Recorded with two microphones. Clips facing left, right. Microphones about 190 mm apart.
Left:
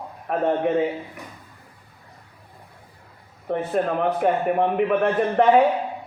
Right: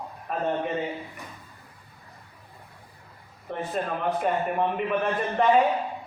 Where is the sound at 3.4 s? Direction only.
55° left (ahead or behind).